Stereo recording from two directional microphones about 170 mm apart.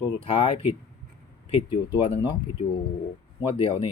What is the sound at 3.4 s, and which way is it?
Speech, 30° left (ahead or behind).